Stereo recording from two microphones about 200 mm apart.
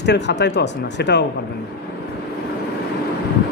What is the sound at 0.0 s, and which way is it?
A man's voice, 60° left (ahead or behind).